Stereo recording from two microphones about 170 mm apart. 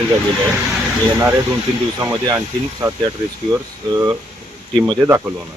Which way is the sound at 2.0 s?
15° right (ahead or behind).